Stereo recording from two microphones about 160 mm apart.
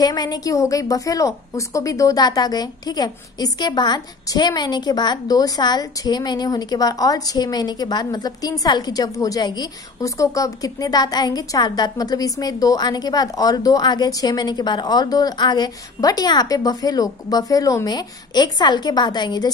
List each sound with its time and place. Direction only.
0.0 s a woman's voice: 25° left (ahead or behind)